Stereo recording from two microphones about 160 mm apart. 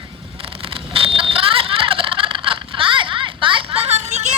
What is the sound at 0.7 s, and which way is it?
Vehicle, 35° right (ahead or behind).